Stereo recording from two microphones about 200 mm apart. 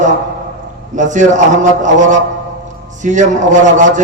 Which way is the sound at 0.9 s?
40° right (ahead or behind).